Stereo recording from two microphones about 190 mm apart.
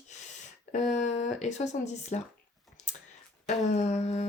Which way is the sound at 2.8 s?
40° left (ahead or behind).